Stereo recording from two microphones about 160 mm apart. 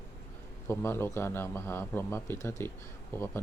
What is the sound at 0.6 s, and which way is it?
Speech, 15° left (ahead or behind).